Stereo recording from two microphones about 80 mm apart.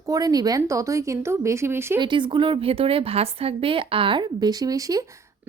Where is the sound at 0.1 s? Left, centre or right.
Right.